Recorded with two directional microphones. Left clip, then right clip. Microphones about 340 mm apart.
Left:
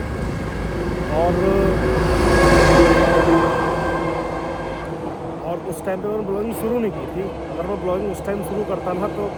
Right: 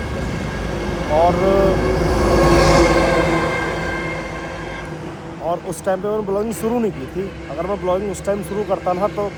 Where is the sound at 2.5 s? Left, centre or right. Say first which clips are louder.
Left 2 dB; left.